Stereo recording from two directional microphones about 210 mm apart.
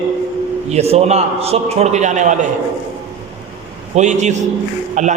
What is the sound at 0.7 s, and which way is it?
A man's voice, 30° right (ahead or behind).